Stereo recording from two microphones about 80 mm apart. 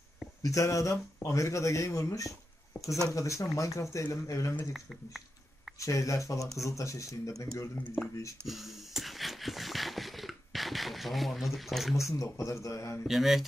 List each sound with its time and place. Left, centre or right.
0.4 s speech: left
4.7 s speech: centre
5.8 s speech: left
8.5 s a sound: centre
12.0 s speech: left
13.0 s speech: centre